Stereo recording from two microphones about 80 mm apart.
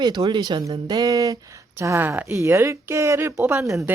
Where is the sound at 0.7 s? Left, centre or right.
Right.